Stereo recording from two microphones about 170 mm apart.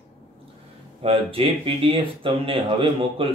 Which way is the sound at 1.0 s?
35° right (ahead or behind).